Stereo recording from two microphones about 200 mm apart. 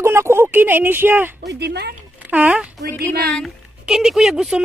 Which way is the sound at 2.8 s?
50° right (ahead or behind).